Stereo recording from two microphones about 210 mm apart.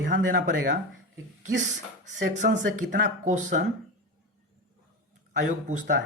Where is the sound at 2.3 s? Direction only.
35° right (ahead or behind).